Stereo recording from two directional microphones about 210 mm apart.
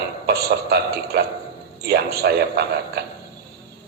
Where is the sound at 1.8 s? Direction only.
50° right (ahead or behind).